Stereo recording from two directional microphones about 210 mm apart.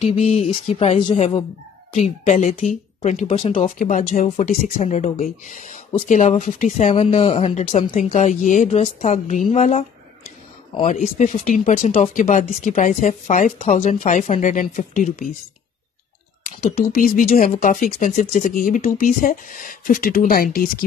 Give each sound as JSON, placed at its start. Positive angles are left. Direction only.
{"t": 0.0, "sound": "a sound", "side_deg": 30}
{"t": 1.9, "sound": "speech", "side_deg": 30}
{"t": 17.0, "sound": "speech", "side_deg": 40}